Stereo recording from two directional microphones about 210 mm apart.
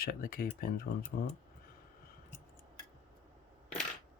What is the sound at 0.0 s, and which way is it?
Speech, 45° left (ahead or behind).